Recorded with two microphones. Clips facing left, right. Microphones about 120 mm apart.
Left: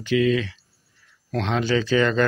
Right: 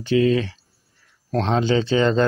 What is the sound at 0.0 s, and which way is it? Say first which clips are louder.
Speech: right 2 dB; 35° right (ahead or behind).